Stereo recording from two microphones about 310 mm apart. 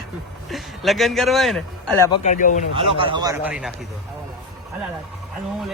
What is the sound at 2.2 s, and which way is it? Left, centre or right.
Speech, left.